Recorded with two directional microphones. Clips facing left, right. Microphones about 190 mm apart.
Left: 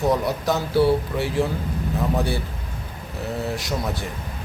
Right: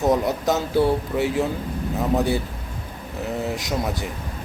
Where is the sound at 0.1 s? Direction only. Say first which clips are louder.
Right 2 dB; 20° right (ahead or behind).